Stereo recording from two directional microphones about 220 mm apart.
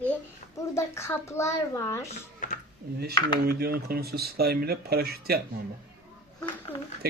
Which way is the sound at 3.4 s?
45° right (ahead or behind).